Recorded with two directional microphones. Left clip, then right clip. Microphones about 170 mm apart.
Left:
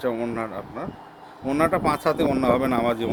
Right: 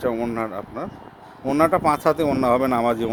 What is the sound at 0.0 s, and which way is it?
Speech, 35° right (ahead or behind).